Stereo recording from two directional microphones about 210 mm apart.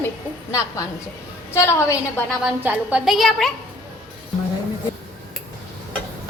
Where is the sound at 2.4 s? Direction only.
5° right (ahead or behind).